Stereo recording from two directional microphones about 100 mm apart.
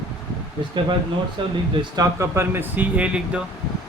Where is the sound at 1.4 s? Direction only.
55° right (ahead or behind).